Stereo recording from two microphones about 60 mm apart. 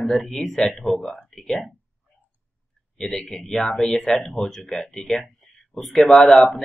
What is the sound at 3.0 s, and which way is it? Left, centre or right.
Speech, centre.